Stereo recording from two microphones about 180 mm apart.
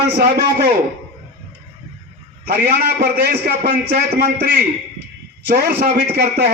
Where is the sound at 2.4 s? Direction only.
60° right (ahead or behind).